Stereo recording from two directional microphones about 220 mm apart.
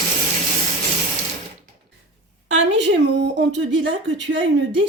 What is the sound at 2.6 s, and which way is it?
Speech, 55° right (ahead or behind).